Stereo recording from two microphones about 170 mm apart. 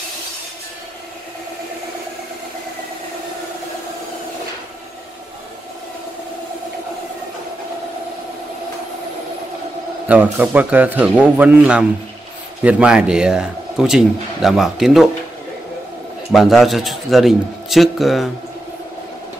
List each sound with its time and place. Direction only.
10.0 s a man's voice: 10° right (ahead or behind)
16.3 s a man's voice: centre (ahead or behind)